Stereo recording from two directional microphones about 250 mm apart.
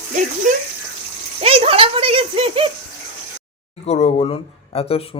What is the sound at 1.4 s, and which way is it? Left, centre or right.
Speech, right.